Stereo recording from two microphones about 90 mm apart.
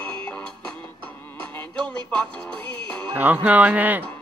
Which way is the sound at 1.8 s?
10° left (ahead or behind).